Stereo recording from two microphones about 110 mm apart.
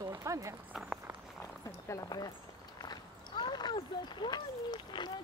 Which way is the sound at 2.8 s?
40° left (ahead or behind).